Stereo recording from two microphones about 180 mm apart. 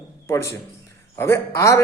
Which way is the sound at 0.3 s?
15° left (ahead or behind).